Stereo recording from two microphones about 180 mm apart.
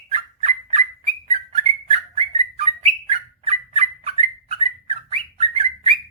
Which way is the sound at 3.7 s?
35° right (ahead or behind).